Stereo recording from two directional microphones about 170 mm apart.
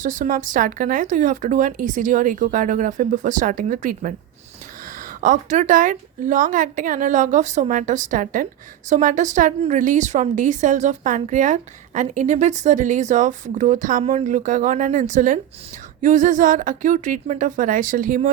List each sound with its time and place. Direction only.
0.0 s a woman's voice: 50° right (ahead or behind)